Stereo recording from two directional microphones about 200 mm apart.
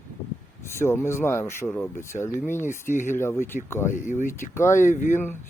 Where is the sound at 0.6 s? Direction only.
10° left (ahead or behind).